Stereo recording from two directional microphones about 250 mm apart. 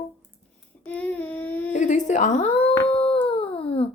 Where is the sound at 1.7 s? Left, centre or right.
Left.